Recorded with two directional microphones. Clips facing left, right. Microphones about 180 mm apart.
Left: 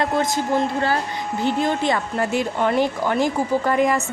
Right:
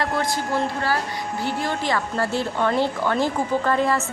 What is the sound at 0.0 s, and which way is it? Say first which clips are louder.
A woman's voice: left 3 dB; 20° left (ahead or behind).